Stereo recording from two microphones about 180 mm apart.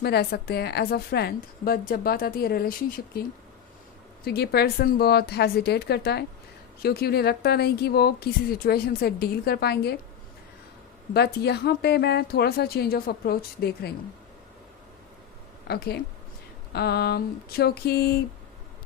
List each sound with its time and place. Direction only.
0.0 s a woman's voice: 60° left (ahead or behind)
4.2 s a woman's voice: 60° left (ahead or behind)
11.1 s a woman's voice: 65° left (ahead or behind)
15.6 s a woman's voice: 65° left (ahead or behind)